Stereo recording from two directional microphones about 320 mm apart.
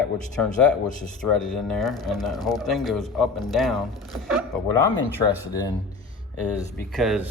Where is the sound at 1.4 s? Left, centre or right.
Centre.